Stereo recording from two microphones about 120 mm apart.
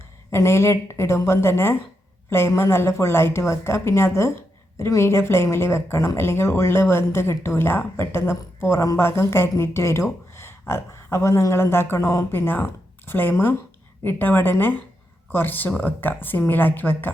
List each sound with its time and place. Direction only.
0.3 s speech: 20° left (ahead or behind)